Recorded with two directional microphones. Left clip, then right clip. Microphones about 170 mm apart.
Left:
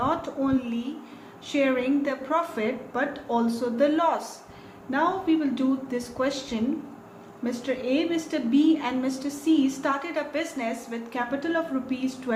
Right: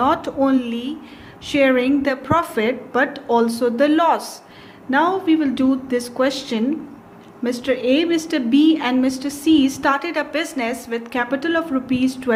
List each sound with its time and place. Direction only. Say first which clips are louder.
0.0 s a woman's voice: right 9 dB; 60° right (ahead or behind)